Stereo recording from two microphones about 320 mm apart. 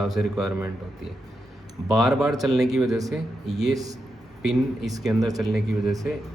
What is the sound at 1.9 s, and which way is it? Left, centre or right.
A man's voice, centre.